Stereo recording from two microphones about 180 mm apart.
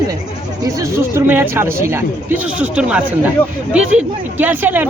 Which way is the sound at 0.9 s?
15° right (ahead or behind).